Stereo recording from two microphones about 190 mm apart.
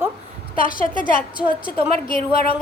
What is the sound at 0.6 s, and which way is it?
Speech, 45° left (ahead or behind).